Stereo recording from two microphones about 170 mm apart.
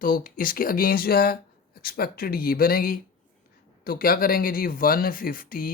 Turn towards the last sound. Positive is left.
turn(degrees=55)  # may be behind; listen again after turning